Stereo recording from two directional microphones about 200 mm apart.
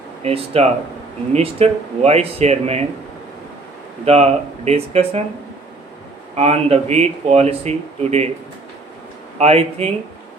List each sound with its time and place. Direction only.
0.2 s speech: 30° right (ahead or behind)
4.0 s speech: 30° right (ahead or behind)
6.3 s speech: 30° right (ahead or behind)
9.4 s speech: 30° right (ahead or behind)